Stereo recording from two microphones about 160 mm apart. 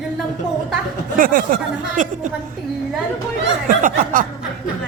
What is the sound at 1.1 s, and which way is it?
Speech, 60° right (ahead or behind).